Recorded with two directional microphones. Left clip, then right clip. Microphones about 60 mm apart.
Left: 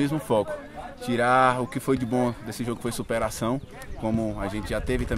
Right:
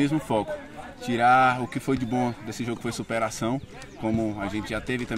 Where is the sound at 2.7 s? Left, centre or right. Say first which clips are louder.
Left 2 dB; left.